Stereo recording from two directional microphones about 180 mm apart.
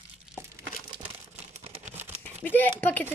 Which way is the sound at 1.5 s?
35° right (ahead or behind).